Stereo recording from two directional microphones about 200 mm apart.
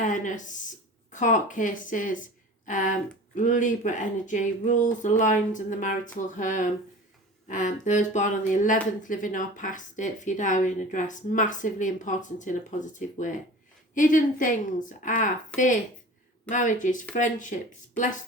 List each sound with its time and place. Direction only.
0.0 s speech: 40° left (ahead or behind)